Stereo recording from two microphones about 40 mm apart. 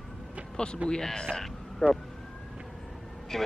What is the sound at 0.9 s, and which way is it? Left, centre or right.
Speech, centre.